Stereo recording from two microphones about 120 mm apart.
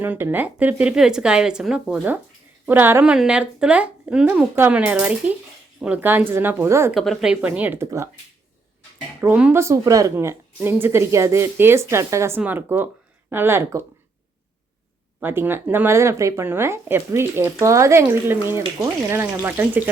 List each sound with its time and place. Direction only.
0.0 s speech: 15° right (ahead or behind)
6.9 s speech: centre (ahead or behind)
7.8 s speech: 25° right (ahead or behind)
9.2 s speech: 15° right (ahead or behind)
15.2 s speech: 15° right (ahead or behind)